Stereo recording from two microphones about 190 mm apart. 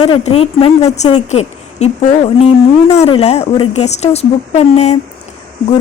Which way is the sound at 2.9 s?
35° left (ahead or behind).